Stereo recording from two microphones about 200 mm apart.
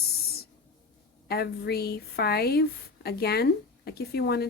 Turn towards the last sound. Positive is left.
turn(degrees=55)  # may be behind; listen again after turning